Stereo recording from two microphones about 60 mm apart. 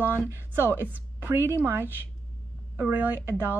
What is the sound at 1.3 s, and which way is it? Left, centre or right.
Speech, right.